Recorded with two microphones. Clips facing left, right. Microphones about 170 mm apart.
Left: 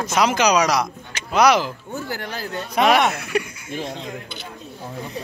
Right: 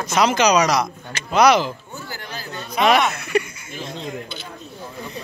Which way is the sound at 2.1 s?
70° left (ahead or behind).